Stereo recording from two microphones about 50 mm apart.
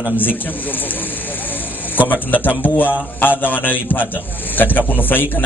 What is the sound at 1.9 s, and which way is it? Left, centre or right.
A man's voice, left.